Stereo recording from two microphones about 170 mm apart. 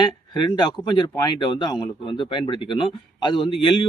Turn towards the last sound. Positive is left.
turn(degrees=30)  # may be behind; listen again after turning